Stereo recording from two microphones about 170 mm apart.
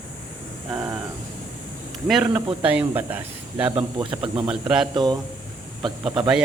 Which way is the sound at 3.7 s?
30° right (ahead or behind).